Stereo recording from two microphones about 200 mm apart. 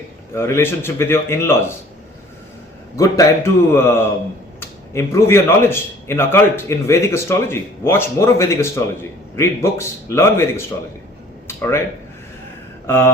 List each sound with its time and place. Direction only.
0.3 s a man's voice: 10° left (ahead or behind)
2.9 s a man's voice: 15° left (ahead or behind)
4.9 s a man's voice: 15° left (ahead or behind)
11.4 s a sound: 10° left (ahead or behind)